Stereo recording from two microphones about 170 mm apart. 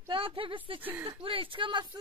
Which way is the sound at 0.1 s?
30° right (ahead or behind).